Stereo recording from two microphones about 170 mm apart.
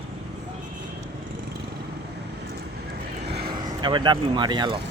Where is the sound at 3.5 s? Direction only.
25° right (ahead or behind).